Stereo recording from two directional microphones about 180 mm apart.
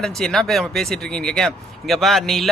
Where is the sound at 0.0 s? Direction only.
Centre (ahead or behind).